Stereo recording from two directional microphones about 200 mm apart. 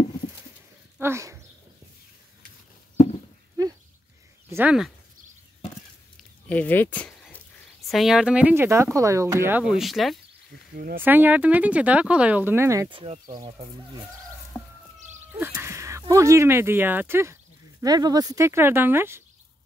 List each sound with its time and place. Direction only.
0.9 s a sound: 10° right (ahead or behind)
4.5 s speech: 10° right (ahead or behind)
6.5 s speech: 10° left (ahead or behind)
10.7 s speech: 45° right (ahead or behind)
11.0 s speech: 10° right (ahead or behind)
12.9 s speech: 30° right (ahead or behind)
14.5 s a sound: 15° left (ahead or behind)
15.3 s speech: 10° right (ahead or behind)